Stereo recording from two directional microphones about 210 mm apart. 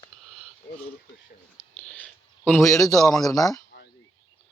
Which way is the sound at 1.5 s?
5° left (ahead or behind).